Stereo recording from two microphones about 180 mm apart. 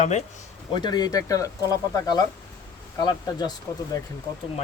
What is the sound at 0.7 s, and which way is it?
Speech, 25° left (ahead or behind).